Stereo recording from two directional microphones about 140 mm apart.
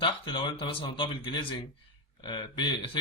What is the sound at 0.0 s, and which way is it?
Speech, 35° left (ahead or behind).